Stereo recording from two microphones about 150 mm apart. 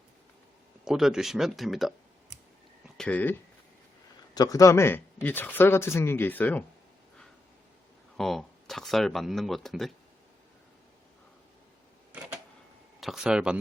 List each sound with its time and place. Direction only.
0.9 s speech: 5° right (ahead or behind)
3.0 s speech: 10° left (ahead or behind)
4.4 s speech: 25° left (ahead or behind)
8.1 s speech: centre (ahead or behind)
13.0 s speech: 5° right (ahead or behind)